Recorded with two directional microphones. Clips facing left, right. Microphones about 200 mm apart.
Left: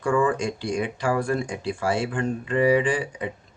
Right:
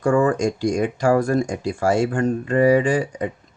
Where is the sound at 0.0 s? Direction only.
45° right (ahead or behind).